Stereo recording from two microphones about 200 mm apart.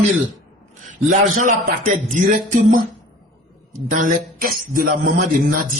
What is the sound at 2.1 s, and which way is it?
Music, 40° right (ahead or behind).